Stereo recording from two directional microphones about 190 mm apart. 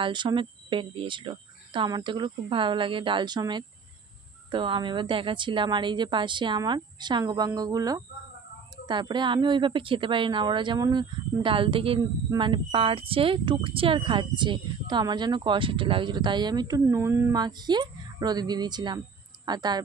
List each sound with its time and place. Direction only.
0.0 s a woman's voice: 25° right (ahead or behind)